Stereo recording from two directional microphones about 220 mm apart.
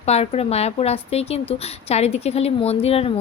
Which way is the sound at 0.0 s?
30° left (ahead or behind).